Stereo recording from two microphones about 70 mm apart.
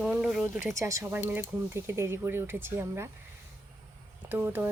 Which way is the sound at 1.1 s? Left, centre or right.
Right.